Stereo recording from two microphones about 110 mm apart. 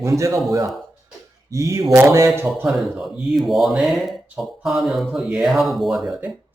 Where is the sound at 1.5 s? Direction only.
30° right (ahead or behind).